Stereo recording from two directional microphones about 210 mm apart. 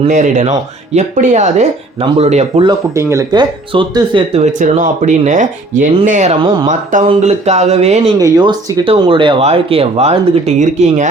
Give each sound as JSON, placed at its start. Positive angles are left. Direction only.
{"t": 0.0, "sound": "speech", "side_deg": -35}
{"t": 2.6, "sound": "speech", "side_deg": -15}
{"t": 4.6, "sound": "speech", "side_deg": -35}
{"t": 6.4, "sound": "speech", "side_deg": -20}
{"t": 6.7, "sound": "speech", "side_deg": -35}
{"t": 8.2, "sound": "speech", "side_deg": -20}